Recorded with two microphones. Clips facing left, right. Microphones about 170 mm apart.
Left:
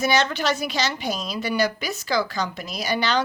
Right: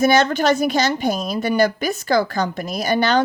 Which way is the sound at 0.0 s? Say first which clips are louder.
Right 6 dB; 50° right (ahead or behind).